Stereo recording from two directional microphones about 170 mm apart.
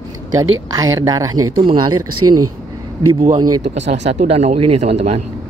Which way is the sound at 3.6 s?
45° right (ahead or behind).